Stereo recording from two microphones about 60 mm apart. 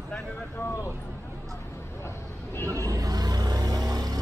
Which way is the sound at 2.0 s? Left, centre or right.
Left.